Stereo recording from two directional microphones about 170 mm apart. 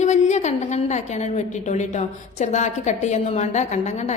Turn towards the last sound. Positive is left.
turn(degrees=45)  # may be behind; listen again after turning